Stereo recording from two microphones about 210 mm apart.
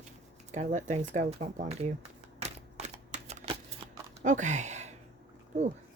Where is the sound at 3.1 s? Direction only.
35° right (ahead or behind).